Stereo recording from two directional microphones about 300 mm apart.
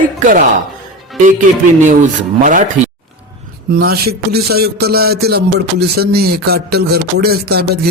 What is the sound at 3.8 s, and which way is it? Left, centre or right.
Speech, right.